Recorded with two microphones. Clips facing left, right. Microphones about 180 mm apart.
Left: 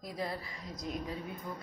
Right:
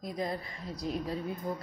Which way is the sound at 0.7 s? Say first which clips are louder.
Right 5 dB; 35° right (ahead or behind).